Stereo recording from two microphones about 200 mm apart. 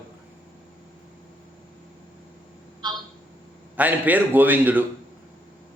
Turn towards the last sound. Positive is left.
turn(degrees=-10)  # may be behind; listen again after turning